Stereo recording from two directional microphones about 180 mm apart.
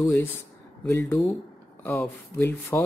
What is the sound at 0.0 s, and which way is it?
Speech, 15° left (ahead or behind).